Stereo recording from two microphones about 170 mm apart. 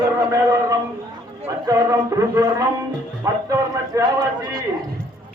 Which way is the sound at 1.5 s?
20° right (ahead or behind).